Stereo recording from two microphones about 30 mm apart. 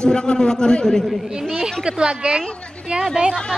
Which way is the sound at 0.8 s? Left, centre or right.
Centre.